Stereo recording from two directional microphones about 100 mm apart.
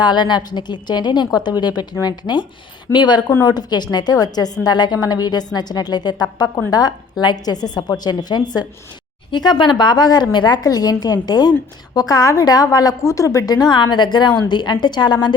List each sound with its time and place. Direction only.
0.0 s a woman's voice: 50° left (ahead or behind)